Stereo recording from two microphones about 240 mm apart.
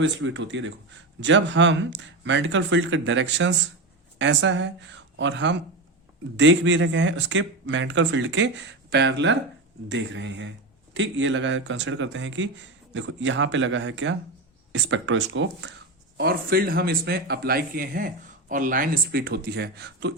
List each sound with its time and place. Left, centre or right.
0.0 s speech: right